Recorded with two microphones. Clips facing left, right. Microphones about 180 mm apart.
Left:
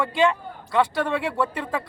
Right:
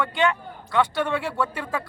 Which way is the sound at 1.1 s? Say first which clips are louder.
Left 1 dB; 25° left (ahead or behind).